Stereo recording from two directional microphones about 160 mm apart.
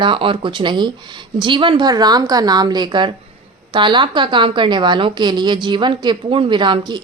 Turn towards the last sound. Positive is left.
turn(degrees=-30)  # may be behind; listen again after turning